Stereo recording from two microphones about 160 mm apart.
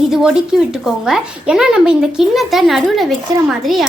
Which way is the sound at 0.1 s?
5° right (ahead or behind).